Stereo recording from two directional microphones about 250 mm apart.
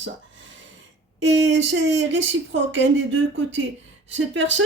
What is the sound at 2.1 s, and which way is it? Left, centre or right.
Speech, right.